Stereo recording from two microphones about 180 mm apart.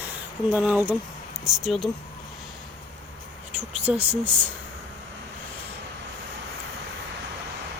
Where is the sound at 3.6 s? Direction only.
10° right (ahead or behind).